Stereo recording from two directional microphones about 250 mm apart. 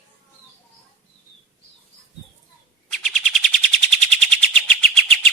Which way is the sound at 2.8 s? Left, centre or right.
Centre.